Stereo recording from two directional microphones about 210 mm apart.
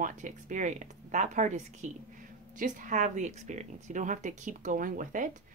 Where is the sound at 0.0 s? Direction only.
35° right (ahead or behind).